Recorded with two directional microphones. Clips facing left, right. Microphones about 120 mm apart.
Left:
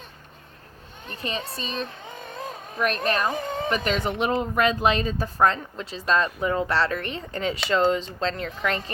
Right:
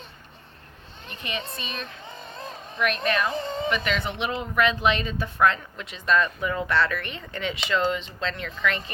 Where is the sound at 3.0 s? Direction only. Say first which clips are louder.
Even; 40° left (ahead or behind).